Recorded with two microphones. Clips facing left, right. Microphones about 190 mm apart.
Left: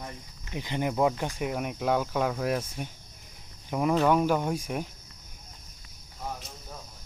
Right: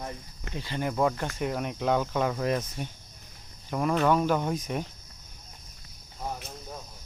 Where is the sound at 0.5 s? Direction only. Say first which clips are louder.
Left 1 dB; 15° left (ahead or behind).